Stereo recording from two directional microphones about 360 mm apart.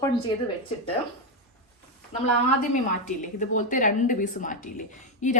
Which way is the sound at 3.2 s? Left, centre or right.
Left.